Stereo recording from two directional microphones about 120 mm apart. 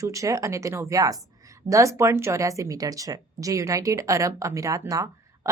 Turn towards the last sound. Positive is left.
turn(degrees=-25)  # may be behind; listen again after turning